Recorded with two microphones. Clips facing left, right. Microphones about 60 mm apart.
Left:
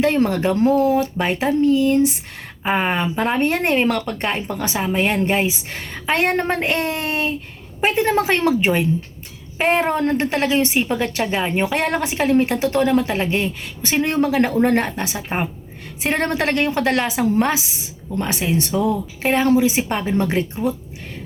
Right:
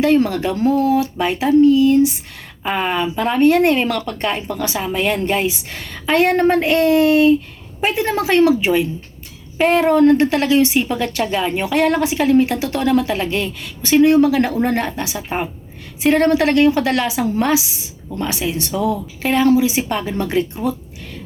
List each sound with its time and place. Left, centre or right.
0.0 s a woman's voice: left
9.6 s a woman's voice: left
14.0 s a woman's voice: left